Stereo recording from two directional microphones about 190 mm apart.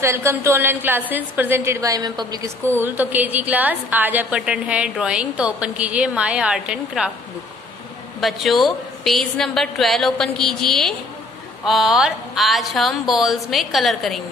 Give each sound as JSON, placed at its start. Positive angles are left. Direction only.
{"t": 0.0, "sound": "a woman's voice", "side_deg": -15}
{"t": 8.2, "sound": "a woman's voice", "side_deg": 0}